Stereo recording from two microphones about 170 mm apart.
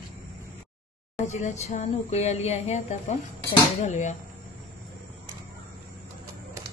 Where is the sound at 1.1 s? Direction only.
45° left (ahead or behind).